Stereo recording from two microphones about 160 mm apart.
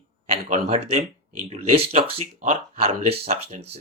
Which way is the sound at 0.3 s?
45° right (ahead or behind).